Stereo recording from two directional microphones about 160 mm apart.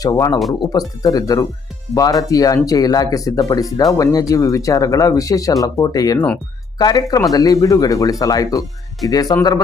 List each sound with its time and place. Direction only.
0.0 s speech: 20° left (ahead or behind)
6.1 s speech: 10° left (ahead or behind)
6.7 s speech: 25° left (ahead or behind)